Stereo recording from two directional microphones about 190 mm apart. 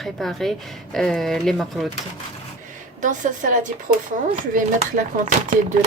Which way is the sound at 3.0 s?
40° right (ahead or behind).